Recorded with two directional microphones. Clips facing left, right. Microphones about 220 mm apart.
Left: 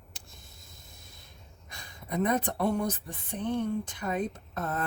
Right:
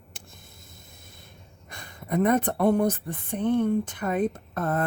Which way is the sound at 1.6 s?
55° right (ahead or behind).